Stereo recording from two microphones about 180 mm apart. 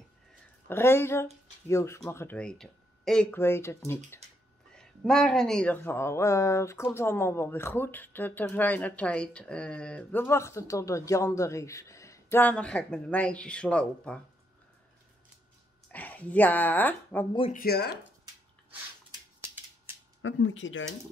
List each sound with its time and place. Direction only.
0.7 s speech: 15° left (ahead or behind)
4.7 s speech: 5° left (ahead or behind)
15.9 s speech: 10° left (ahead or behind)
17.5 s speech: 55° left (ahead or behind)
19.4 s scissors: 10° right (ahead or behind)
20.2 s speech: 90° left